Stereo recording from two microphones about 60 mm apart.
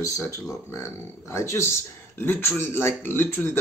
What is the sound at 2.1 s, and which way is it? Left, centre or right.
Speech, left.